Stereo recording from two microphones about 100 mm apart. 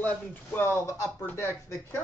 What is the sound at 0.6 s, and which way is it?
Speech, 25° left (ahead or behind).